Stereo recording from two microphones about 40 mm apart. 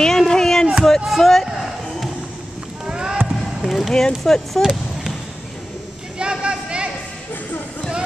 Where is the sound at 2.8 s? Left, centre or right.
Centre.